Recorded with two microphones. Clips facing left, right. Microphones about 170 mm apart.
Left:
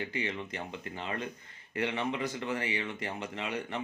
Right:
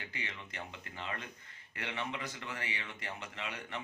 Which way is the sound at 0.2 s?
20° left (ahead or behind).